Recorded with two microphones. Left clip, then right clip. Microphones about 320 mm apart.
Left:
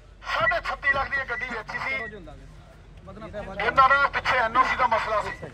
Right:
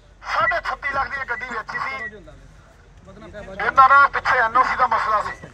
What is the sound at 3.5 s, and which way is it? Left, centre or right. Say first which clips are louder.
A man's voice: right 6 dB; centre.